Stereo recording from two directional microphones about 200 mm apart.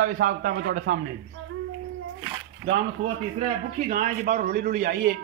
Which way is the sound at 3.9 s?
40° right (ahead or behind).